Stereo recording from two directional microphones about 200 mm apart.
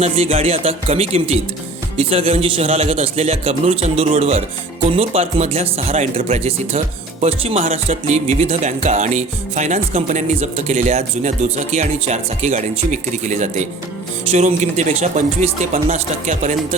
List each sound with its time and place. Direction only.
0.0 s music: 30° right (ahead or behind)
4.9 s speech: 30° right (ahead or behind)
7.7 s music: 35° right (ahead or behind)